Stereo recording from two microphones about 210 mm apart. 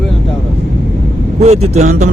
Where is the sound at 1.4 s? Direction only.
30° right (ahead or behind).